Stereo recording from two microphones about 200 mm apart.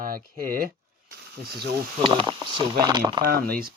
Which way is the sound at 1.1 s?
55° right (ahead or behind).